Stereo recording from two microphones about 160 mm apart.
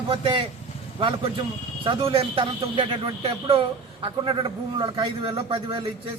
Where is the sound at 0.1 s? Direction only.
30° right (ahead or behind).